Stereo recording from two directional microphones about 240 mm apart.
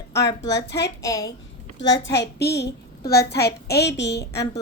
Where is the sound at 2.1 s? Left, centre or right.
Left.